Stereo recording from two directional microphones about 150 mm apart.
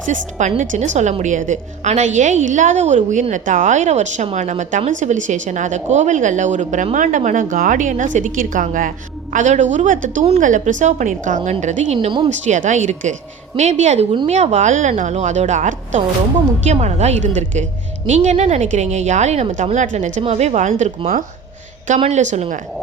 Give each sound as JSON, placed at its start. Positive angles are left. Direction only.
{"t": 0.1, "sound": "a woman's voice", "side_deg": -55}
{"t": 11.9, "sound": "speech", "side_deg": -35}
{"t": 12.5, "sound": "a woman's voice", "side_deg": -55}